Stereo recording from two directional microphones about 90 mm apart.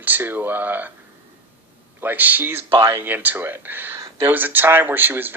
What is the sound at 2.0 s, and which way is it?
Speech, 20° right (ahead or behind).